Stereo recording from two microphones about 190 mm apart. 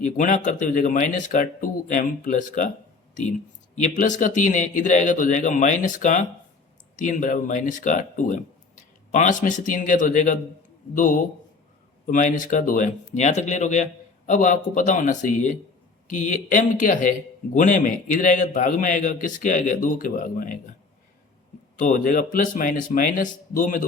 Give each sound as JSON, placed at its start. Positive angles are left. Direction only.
{"t": 0.2, "sound": "speech", "side_deg": 45}
{"t": 3.8, "sound": "a man's voice", "side_deg": 40}
{"t": 12.0, "sound": "speech", "side_deg": 45}
{"t": 21.8, "sound": "speech", "side_deg": 45}